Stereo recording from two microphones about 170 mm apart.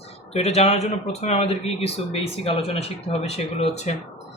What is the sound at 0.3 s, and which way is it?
Speech, 40° left (ahead or behind).